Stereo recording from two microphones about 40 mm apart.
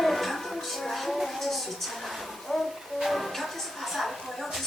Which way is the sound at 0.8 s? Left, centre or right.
Centre.